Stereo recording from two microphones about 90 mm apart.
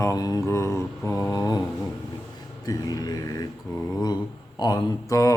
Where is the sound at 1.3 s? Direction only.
45° left (ahead or behind).